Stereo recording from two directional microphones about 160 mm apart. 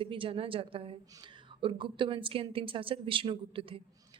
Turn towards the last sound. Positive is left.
turn(degrees=-35)  # may be behind; listen again after turning